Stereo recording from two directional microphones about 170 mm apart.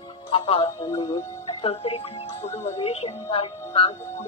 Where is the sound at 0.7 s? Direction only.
20° left (ahead or behind).